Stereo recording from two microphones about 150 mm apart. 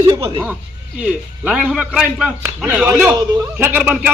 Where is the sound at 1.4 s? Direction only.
5° right (ahead or behind).